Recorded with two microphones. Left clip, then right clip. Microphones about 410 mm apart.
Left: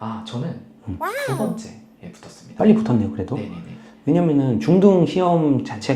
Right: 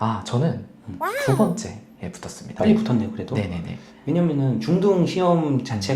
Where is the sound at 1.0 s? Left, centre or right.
Centre.